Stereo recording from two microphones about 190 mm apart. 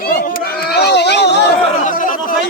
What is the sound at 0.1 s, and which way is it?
Chatter, 55° left (ahead or behind).